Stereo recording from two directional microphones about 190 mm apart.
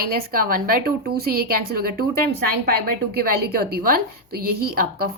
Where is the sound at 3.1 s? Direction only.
55° right (ahead or behind).